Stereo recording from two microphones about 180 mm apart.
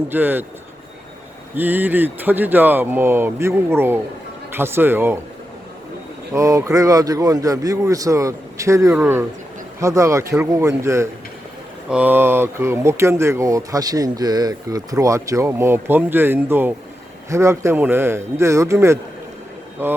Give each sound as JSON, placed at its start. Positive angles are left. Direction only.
{"t": 0.1, "sound": "speech", "side_deg": -10}
{"t": 1.5, "sound": "speech", "side_deg": -10}
{"t": 6.3, "sound": "speech", "side_deg": -15}